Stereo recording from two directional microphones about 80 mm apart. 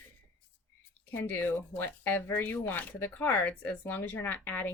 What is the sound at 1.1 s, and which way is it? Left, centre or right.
Speech, left.